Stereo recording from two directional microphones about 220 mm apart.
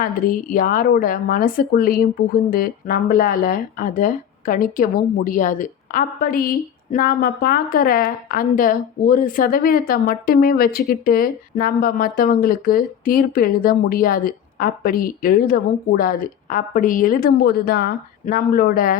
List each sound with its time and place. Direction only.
0.0 s a woman's voice: 40° left (ahead or behind)